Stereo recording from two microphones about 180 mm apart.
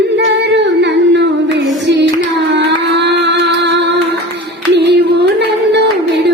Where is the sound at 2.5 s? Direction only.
75° right (ahead or behind).